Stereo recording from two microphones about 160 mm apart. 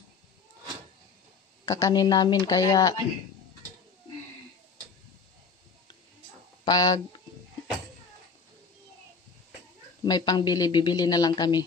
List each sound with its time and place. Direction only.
1.7 s speech: 20° left (ahead or behind)
6.6 s speech: 25° left (ahead or behind)
10.0 s speech: 25° left (ahead or behind)